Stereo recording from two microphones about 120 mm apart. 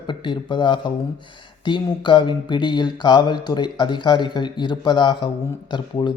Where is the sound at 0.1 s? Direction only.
40° left (ahead or behind).